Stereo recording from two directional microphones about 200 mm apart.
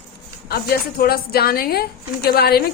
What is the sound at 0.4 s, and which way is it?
A woman's voice, 50° left (ahead or behind).